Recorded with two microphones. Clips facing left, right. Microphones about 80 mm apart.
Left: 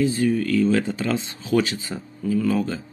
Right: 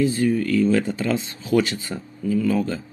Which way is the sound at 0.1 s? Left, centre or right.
Right.